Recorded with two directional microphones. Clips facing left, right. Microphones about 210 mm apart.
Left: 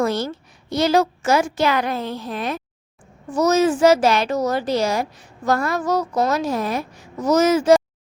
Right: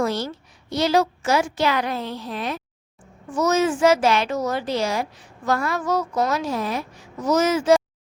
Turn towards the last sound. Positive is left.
turn(degrees=40)  # may be behind; listen again after turning